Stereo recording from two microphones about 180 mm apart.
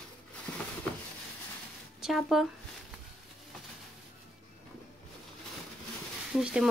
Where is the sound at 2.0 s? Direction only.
Centre (ahead or behind).